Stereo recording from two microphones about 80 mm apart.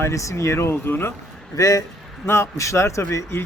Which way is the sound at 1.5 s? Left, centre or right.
Left.